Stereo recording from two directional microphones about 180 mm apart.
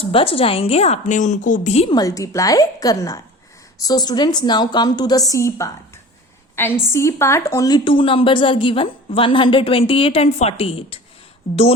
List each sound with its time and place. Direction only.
0.0 s a woman's voice: 30° left (ahead or behind)
1.9 s a woman's voice: 20° left (ahead or behind)